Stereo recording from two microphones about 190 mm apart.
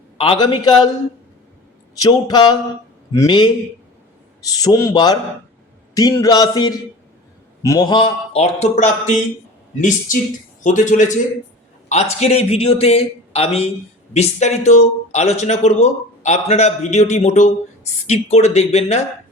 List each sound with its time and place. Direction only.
0.2 s a man's voice: 25° left (ahead or behind)
2.0 s a man's voice: 20° left (ahead or behind)